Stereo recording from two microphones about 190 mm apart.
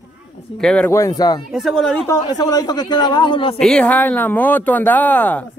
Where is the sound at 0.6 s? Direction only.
5° left (ahead or behind); by 1.4 s 20° left (ahead or behind).